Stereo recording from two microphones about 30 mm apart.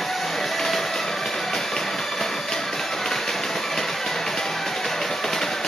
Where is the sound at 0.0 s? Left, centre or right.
Centre.